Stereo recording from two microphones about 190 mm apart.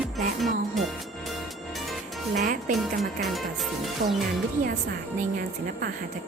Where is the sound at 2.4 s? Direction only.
40° right (ahead or behind).